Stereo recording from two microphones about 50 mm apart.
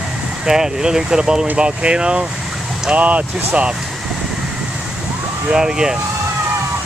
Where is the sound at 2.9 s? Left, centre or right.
Right.